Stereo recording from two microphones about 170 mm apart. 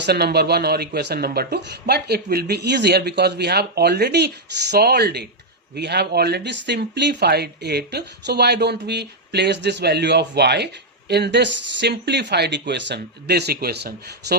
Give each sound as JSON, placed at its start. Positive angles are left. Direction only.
{"t": 0.0, "sound": "speech", "side_deg": -70}